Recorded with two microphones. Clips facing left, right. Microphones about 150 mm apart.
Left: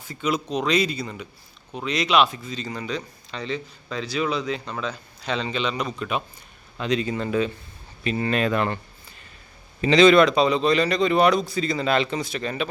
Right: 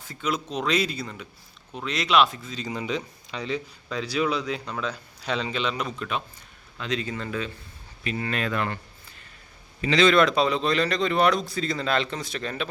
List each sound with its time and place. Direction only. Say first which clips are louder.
0.1 s speech: left 4 dB; centre (ahead or behind)
2.6 s speech: right 2 dB; 15° right (ahead or behind)
3.4 s speech: even; 5° right (ahead or behind)
6.7 s speech: left 5 dB; 15° left (ahead or behind)
9.8 s speech: left 5 dB; 15° left (ahead or behind)
10.2 s speech: left 3 dB; centre (ahead or behind)